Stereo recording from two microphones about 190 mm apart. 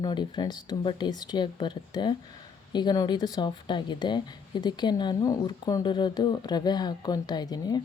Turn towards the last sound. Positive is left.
turn(degrees=20)  # may be behind; listen again after turning